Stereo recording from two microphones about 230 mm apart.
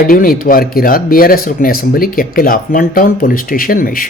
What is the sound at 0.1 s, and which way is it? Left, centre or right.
Speech, left.